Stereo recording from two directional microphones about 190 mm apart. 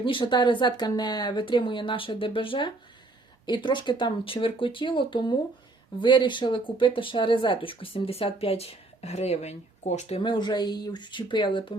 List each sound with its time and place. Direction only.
0.0 s speech: 25° left (ahead or behind)
10.2 s speech: 25° left (ahead or behind)